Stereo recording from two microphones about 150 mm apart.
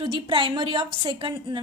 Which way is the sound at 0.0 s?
35° right (ahead or behind).